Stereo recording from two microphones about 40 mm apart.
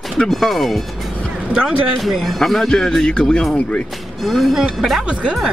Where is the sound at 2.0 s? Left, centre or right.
Centre.